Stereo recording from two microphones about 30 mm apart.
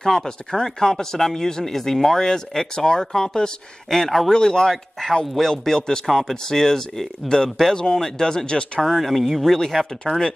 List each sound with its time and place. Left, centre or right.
0.0 s speech: centre
4.3 s speech: left
6.0 s speech: centre
8.8 s speech: centre
10.1 s speech: left